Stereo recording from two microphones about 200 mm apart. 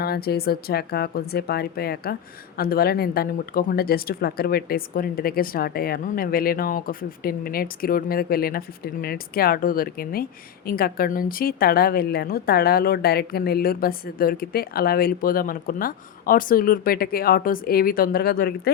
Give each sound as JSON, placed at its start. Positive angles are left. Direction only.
{"t": 0.0, "sound": "speech", "side_deg": 50}